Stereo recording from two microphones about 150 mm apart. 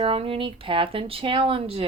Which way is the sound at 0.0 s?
35° right (ahead or behind).